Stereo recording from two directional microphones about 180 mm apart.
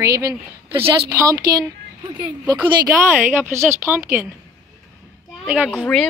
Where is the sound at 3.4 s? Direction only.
15° right (ahead or behind).